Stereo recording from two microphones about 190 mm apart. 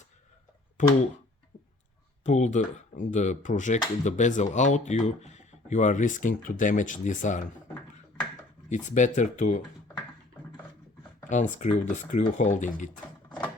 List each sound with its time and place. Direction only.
0.8 s speech: 40° left (ahead or behind)
2.2 s speech: 40° left (ahead or behind)
8.7 s speech: 40° left (ahead or behind)
11.3 s speech: 40° left (ahead or behind)